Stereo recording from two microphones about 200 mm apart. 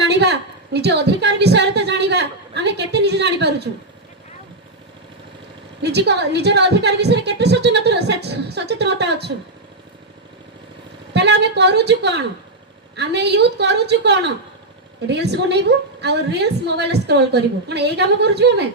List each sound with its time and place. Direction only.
0.0 s a woman's voice: 60° right (ahead or behind)
5.8 s a woman's voice: 55° right (ahead or behind)
11.1 s a woman's voice: 60° right (ahead or behind)